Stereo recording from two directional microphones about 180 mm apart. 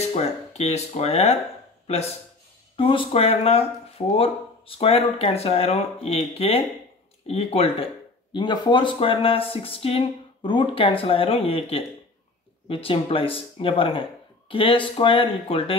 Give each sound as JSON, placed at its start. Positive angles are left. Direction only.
{"t": 0.0, "sound": "speech", "side_deg": 35}